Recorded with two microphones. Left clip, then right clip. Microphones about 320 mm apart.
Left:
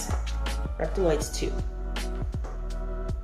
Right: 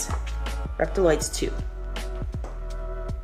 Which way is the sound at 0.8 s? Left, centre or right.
Centre.